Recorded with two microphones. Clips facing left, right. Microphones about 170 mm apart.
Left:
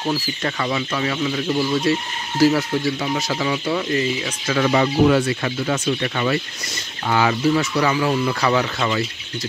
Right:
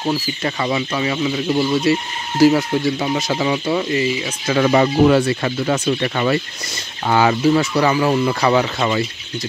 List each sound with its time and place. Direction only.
0.0 s speech: 15° right (ahead or behind)
4.5 s speech: 30° right (ahead or behind)